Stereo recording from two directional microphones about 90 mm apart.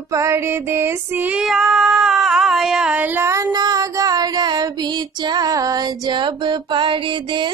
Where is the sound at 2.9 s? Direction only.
20° right (ahead or behind).